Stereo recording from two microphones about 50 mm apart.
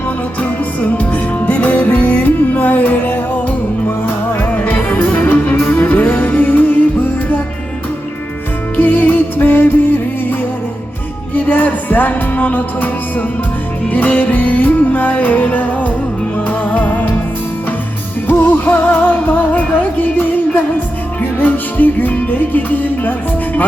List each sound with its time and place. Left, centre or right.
0.8 s music: left
8.7 s music: left
11.3 s music: left
18.3 s music: left